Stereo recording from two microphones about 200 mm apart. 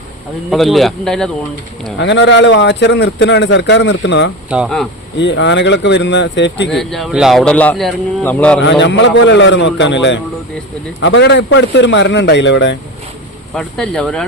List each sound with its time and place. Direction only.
0.5 s speech: centre (ahead or behind)
2.0 s a man's voice: 60° left (ahead or behind)
4.4 s speech: 5° right (ahead or behind)
5.2 s a man's voice: 60° left (ahead or behind)
6.7 s speech: centre (ahead or behind)
8.6 s a man's voice: 60° left (ahead or behind)
13.5 s speech: 5° left (ahead or behind)